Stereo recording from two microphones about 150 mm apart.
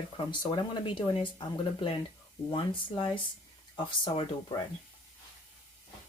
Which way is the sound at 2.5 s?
35° left (ahead or behind).